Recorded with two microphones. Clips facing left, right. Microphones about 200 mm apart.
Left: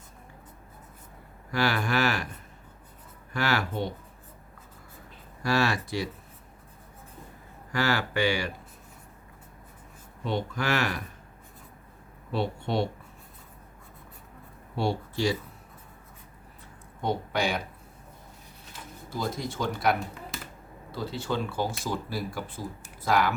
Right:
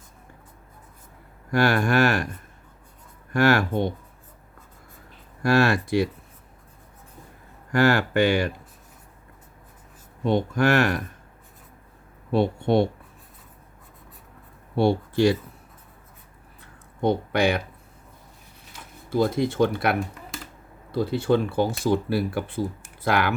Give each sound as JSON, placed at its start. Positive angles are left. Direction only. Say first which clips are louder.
{"t": 1.5, "sound": "speech", "louder": "right 6 dB", "side_deg": -50}
{"t": 3.3, "sound": "speech", "louder": "right 8 dB", "side_deg": -50}
{"t": 5.4, "sound": "speech", "louder": "right 6 dB", "side_deg": -55}
{"t": 7.7, "sound": "speech", "louder": "right 7 dB", "side_deg": -50}
{"t": 10.2, "sound": "speech", "louder": "right 8 dB", "side_deg": -50}
{"t": 12.3, "sound": "speech", "louder": "right 8 dB", "side_deg": -50}
{"t": 14.8, "sound": "speech", "louder": "right 8 dB", "side_deg": -55}
{"t": 17.0, "sound": "speech", "louder": "right 7 dB", "side_deg": -60}
{"t": 19.1, "sound": "speech", "louder": "right 10 dB", "side_deg": -60}